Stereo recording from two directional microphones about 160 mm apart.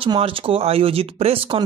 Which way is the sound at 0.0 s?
35° right (ahead or behind).